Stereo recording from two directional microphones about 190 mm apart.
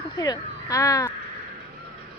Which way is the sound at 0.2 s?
20° left (ahead or behind).